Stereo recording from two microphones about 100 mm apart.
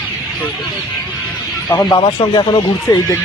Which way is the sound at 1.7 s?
35° left (ahead or behind).